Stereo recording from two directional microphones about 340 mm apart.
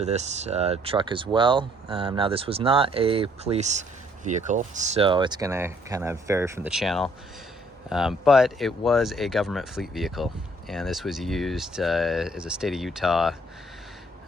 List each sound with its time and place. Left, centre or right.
0.0 s speech: centre